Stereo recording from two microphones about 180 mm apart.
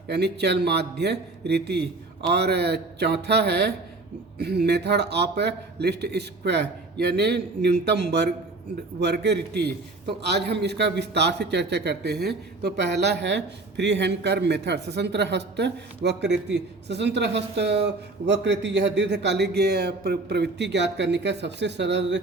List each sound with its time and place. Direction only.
0.1 s a man's voice: 65° right (ahead or behind)